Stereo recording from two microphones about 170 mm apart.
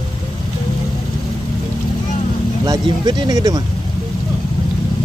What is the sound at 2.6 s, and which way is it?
Speech, 25° right (ahead or behind).